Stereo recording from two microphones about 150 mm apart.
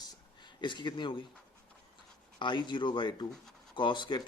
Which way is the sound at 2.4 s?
30° left (ahead or behind).